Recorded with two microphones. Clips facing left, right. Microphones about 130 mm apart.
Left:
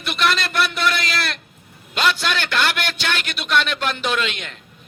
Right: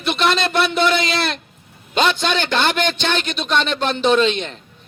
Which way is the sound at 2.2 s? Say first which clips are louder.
Right 3 dB; 30° right (ahead or behind).